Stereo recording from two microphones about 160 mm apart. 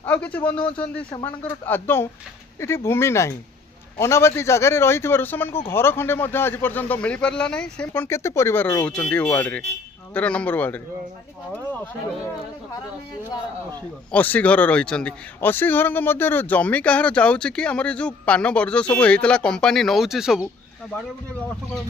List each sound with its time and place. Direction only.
0.0 s a man's voice: 10° left (ahead or behind)
14.1 s a man's voice: 10° left (ahead or behind)